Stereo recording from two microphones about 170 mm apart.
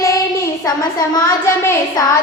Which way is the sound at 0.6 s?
25° left (ahead or behind).